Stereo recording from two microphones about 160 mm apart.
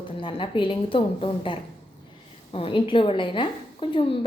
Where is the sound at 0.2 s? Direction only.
35° left (ahead or behind).